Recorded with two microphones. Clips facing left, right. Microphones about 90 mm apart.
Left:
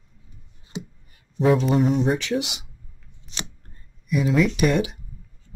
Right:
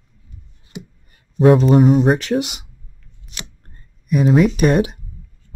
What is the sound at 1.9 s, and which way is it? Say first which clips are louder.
Speech: right 7 dB; 55° right (ahead or behind).